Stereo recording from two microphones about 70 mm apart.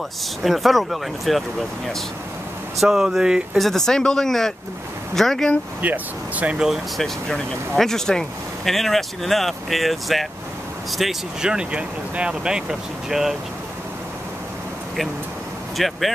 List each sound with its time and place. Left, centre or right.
0.4 s speech: centre
2.8 s speech: centre
3.5 s speech: centre
5.8 s speech: right
7.0 s speech: centre
15.8 s speech: centre